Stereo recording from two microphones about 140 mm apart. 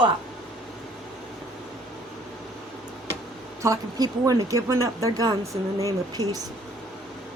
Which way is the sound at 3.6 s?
25° right (ahead or behind).